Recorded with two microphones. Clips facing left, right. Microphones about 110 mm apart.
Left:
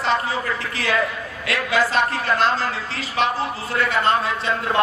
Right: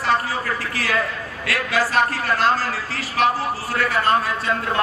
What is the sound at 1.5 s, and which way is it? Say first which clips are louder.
A woman's voice: left 1 dB; 20° left (ahead or behind).